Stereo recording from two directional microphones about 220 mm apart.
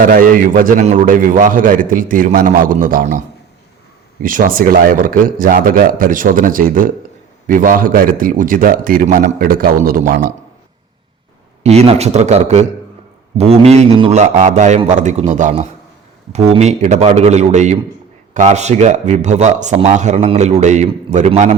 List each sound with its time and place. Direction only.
0.0 s a man's voice: 40° right (ahead or behind)
4.2 s a man's voice: 40° right (ahead or behind)
11.6 s a man's voice: 30° right (ahead or behind)